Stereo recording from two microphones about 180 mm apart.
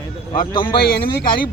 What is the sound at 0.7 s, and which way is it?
Speech, 55° left (ahead or behind).